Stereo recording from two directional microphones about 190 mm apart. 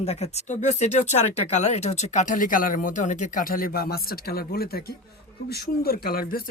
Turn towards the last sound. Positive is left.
turn(degrees=50)  # may be behind; listen again after turning